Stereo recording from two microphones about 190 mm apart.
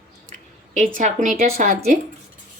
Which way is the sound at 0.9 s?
40° right (ahead or behind).